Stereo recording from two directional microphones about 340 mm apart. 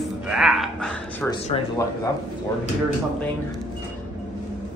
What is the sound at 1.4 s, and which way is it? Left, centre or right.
Speech, centre.